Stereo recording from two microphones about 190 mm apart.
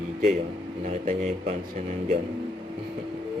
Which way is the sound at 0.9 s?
40° right (ahead or behind).